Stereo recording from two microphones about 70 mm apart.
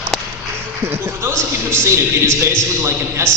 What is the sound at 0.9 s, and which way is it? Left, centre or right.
A man's voice, right.